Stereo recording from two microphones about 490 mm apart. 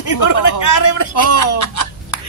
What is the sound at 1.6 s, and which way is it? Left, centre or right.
Hiccup, left.